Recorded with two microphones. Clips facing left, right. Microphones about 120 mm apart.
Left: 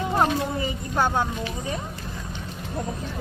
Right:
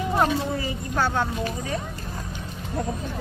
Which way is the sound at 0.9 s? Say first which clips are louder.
Left 1 dB; 15° left (ahead or behind).